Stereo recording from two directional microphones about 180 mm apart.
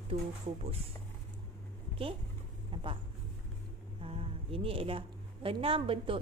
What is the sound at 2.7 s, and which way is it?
Speech, 30° right (ahead or behind).